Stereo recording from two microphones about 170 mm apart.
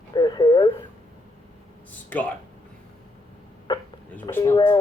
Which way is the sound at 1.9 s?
10° left (ahead or behind).